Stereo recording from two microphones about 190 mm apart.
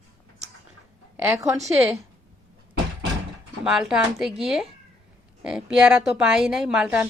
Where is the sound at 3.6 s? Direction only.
Centre (ahead or behind).